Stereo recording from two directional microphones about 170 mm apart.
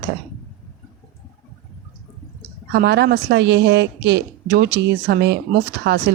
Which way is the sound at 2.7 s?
85° right.